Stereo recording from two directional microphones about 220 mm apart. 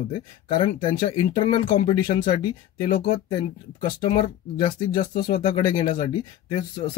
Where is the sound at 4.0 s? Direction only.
20° left (ahead or behind).